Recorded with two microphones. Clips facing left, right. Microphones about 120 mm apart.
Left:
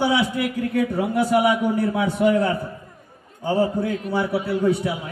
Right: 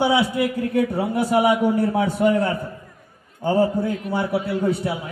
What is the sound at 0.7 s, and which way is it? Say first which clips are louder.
Speech: even; 45° right (ahead or behind).